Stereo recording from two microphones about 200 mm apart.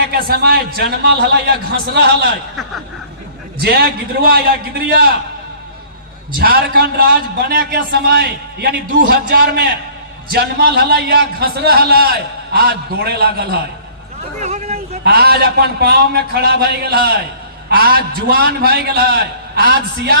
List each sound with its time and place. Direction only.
0.0 s a man's voice: 50° right (ahead or behind)
3.6 s a man's voice: 50° right (ahead or behind)
6.4 s a man's voice: 50° right (ahead or behind)
14.4 s speech: 35° right (ahead or behind)
15.0 s a man's voice: 50° right (ahead or behind)